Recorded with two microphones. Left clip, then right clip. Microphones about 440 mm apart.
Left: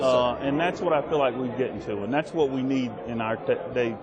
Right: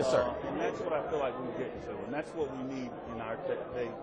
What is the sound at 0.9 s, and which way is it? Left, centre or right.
Speech, left.